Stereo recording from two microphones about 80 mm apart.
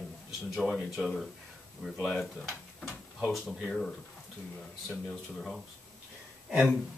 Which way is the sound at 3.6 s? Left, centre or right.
Centre.